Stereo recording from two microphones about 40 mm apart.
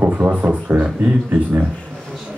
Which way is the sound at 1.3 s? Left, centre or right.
Right.